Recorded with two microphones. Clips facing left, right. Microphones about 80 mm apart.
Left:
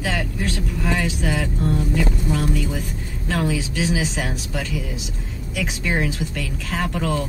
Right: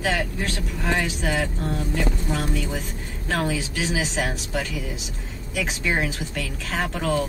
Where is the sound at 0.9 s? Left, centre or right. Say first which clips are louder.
Even; right.